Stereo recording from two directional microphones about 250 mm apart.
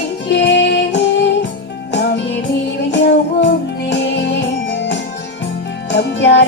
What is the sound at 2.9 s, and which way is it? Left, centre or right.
Music, left.